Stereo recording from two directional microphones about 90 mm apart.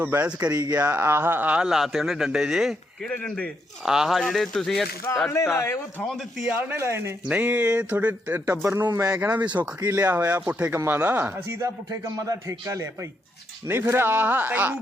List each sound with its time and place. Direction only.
0.0 s a man's voice: 25° right (ahead or behind)
0.9 s a man's voice: 25° right (ahead or behind); by 2.7 s 5° right (ahead or behind)
3.0 s speech: 10° left (ahead or behind)
3.8 s speech: 5° right (ahead or behind)
5.1 s a man's voice: 30° left (ahead or behind)
6.1 s speech: 5° left (ahead or behind)
6.4 s speech: 20° right (ahead or behind)
7.3 s a man's voice: 15° right (ahead or behind)
8.9 s speech: 40° right (ahead or behind)
9.1 s a man's voice: 15° right (ahead or behind)
11.9 s speech: 40° right (ahead or behind); by 14.8 s 20° right (ahead or behind)